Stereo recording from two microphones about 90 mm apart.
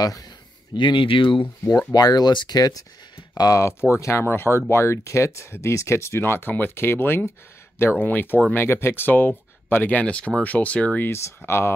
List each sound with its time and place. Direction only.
0.0 s speech: 45° left (ahead or behind)
0.7 s speech: 65° left (ahead or behind)
1.8 s speech: 45° left (ahead or behind); by 11.1 s 15° left (ahead or behind)
11.1 s speech: 30° left (ahead or behind)